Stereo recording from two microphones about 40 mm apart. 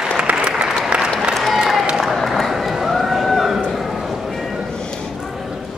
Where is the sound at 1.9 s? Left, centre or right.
Centre.